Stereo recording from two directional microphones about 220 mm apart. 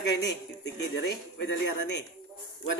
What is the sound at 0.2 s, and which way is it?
A man's voice, 50° left (ahead or behind).